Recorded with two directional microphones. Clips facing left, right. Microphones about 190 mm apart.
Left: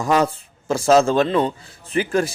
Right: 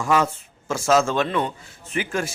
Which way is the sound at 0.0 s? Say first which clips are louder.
Left 3 dB; 35° left (ahead or behind).